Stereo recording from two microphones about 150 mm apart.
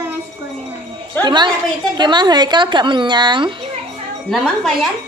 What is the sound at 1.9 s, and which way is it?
Speech, 30° right (ahead or behind).